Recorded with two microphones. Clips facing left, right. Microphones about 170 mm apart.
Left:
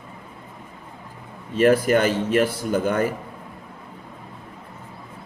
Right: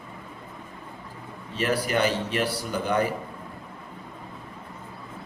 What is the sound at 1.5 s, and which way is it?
A man's voice, 50° left (ahead or behind).